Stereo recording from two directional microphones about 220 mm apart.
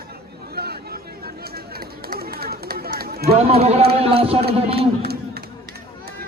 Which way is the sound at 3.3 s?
25° right (ahead or behind).